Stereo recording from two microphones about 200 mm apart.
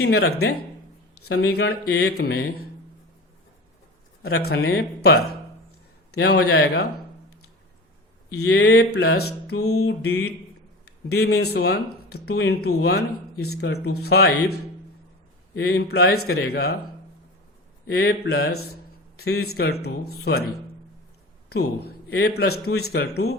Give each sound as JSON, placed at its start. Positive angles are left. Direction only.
{"t": 0.0, "sound": "a sound", "side_deg": 55}
{"t": 1.5, "sound": "speech", "side_deg": 55}
{"t": 4.2, "sound": "speech", "side_deg": 50}
{"t": 6.5, "sound": "a sound", "side_deg": 55}
{"t": 8.4, "sound": "a sound", "side_deg": 55}
{"t": 10.8, "sound": "speech", "side_deg": 50}
{"t": 15.5, "sound": "speech", "side_deg": 50}
{"t": 17.9, "sound": "speech", "side_deg": 50}
{"t": 21.8, "sound": "a man's voice", "side_deg": 55}